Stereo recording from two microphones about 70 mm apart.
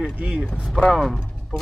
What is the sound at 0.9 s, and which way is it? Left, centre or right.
Speech, centre.